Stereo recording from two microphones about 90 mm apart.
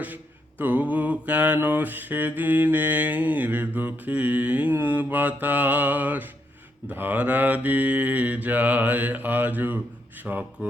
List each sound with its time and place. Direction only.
0.6 s mantra: 15° right (ahead or behind)